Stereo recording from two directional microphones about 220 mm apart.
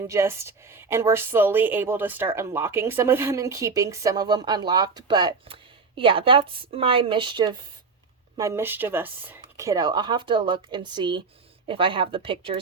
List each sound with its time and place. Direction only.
0.1 s a woman's voice: 10° right (ahead or behind)